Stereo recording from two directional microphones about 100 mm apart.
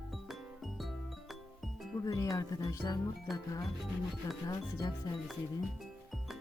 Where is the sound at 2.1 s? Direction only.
35° left (ahead or behind).